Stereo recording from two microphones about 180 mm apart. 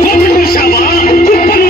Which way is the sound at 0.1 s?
55° left (ahead or behind).